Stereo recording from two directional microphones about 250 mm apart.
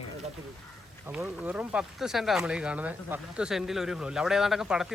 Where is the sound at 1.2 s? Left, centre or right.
Centre.